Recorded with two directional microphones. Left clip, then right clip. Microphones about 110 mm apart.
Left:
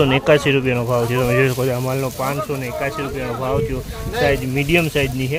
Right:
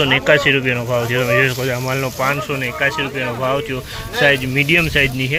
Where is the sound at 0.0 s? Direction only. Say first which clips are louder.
Right 2 dB; 35° left (ahead or behind).